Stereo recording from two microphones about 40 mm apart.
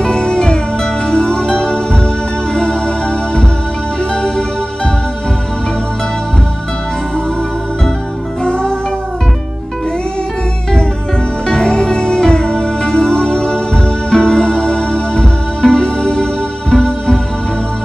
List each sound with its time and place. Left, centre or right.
0.0 s music: centre
4.1 s music: centre
11.4 s music: centre